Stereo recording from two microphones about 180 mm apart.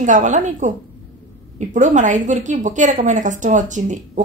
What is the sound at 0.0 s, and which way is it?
A woman's voice, 45° right (ahead or behind).